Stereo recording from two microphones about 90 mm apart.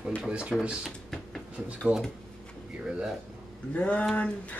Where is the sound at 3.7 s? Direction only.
15° left (ahead or behind).